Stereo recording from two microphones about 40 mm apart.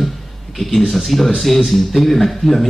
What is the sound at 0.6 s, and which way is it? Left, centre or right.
Speech, centre.